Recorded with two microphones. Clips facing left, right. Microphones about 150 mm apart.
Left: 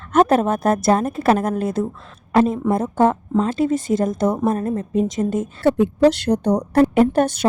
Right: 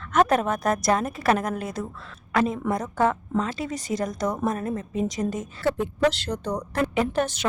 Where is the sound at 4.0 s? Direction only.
25° left (ahead or behind).